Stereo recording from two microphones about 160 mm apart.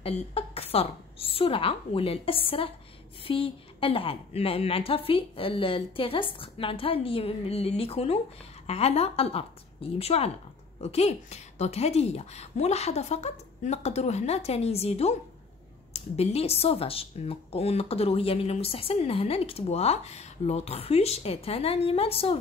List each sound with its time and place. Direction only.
0.0 s speech: 35° left (ahead or behind)